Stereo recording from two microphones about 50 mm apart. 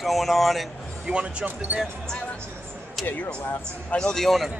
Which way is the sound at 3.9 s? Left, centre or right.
Centre.